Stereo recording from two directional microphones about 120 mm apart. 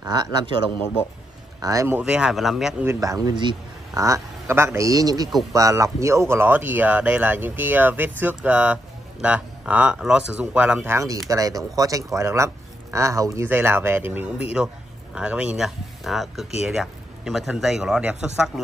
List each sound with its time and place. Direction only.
0.0 s speech: 35° right (ahead or behind)
1.6 s a man's voice: 25° right (ahead or behind)
2.0 s a man's voice: 10° right (ahead or behind)
2.8 s speech: 25° right (ahead or behind)
4.0 s a man's voice: 25° right (ahead or behind)
10.8 s a man's voice: 20° right (ahead or behind); by 18.5 s 5° right (ahead or behind)